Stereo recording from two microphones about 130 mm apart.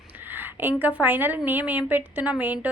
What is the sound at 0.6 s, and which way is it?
A woman's voice, 15° right (ahead or behind).